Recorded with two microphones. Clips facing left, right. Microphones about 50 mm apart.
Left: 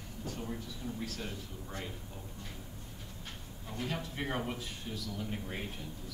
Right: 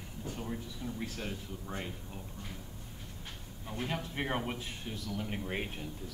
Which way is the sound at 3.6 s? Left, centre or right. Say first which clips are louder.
Right 1 dB; right.